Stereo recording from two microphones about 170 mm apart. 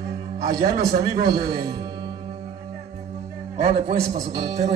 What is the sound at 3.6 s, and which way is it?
Speech, 40° right (ahead or behind).